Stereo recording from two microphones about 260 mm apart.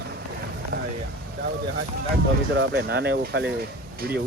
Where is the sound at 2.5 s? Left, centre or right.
Right.